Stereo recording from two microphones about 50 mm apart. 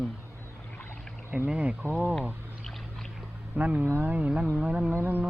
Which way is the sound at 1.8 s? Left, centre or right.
Right.